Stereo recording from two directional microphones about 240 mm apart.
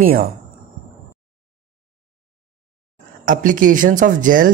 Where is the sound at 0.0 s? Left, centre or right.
Right.